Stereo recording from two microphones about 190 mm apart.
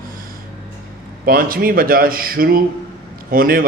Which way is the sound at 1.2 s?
50° right (ahead or behind).